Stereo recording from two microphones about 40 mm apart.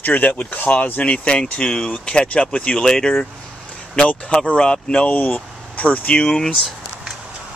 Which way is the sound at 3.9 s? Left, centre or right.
Left.